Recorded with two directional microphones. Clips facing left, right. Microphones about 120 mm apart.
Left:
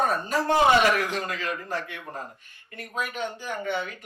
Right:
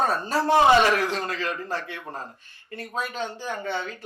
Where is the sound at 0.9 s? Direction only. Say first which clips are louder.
Right 2 dB; 35° right (ahead or behind).